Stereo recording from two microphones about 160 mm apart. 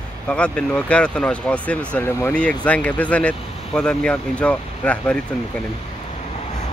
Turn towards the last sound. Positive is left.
turn(degrees=10)  # may be behind; listen again after turning